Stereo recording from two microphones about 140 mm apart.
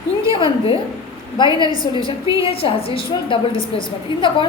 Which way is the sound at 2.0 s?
25° right (ahead or behind).